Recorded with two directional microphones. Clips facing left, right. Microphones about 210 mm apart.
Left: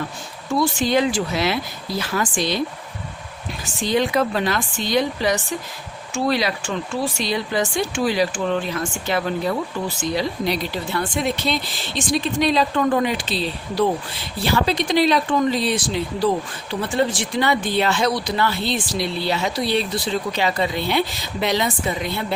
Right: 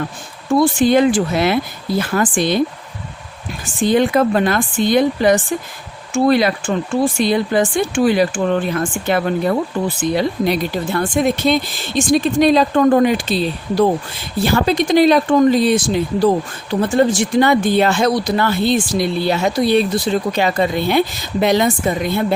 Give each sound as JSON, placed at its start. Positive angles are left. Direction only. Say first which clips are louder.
{"t": 0.5, "sound": "speech", "louder": "right 6 dB", "side_deg": -50}
{"t": 3.8, "sound": "speech", "louder": "right 6 dB", "side_deg": -50}